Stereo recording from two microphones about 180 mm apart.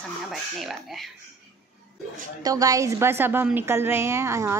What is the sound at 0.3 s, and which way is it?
Speech, centre (ahead or behind).